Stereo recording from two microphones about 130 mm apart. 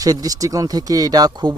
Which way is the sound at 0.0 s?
30° right (ahead or behind).